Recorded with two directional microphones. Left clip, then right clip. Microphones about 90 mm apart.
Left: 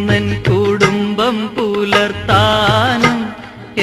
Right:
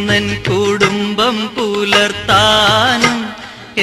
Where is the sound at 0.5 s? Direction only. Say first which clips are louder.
Left 1 dB; 20° right (ahead or behind).